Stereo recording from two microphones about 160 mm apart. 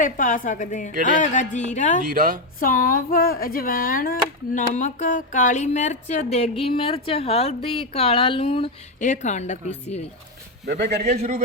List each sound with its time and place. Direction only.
0.0 s a woman's voice: 55° left (ahead or behind)
2.0 s speech: 60° right (ahead or behind)
2.6 s speech: 60° left (ahead or behind)
4.7 s speech: 50° left (ahead or behind)
9.0 s a woman's voice: 50° left (ahead or behind)
10.7 s speech: 70° right (ahead or behind)